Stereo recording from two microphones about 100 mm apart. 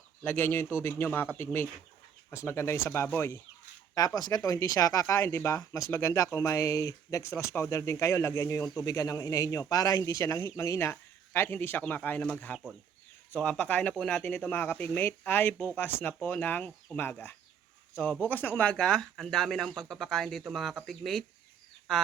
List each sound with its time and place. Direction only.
0.3 s a man's voice: 20° left (ahead or behind)
3.9 s speech: 40° left (ahead or behind); by 22.0 s centre (ahead or behind)